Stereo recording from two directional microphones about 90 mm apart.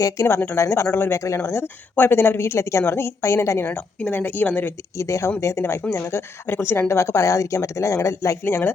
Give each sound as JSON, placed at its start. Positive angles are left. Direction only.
{"t": 0.0, "sound": "speech", "side_deg": 30}
{"t": 3.7, "sound": "speech", "side_deg": 20}
{"t": 4.9, "sound": "speech", "side_deg": 35}